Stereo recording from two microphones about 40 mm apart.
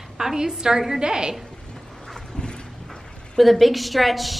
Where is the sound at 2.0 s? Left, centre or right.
Centre.